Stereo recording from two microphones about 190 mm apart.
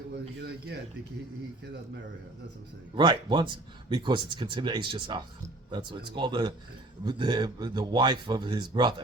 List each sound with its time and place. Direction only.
0.4 s speech: 60° right (ahead or behind)
2.9 s a man's voice: 25° right (ahead or behind)